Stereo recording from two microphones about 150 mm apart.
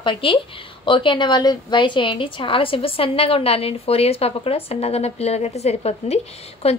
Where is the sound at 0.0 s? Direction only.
35° left (ahead or behind).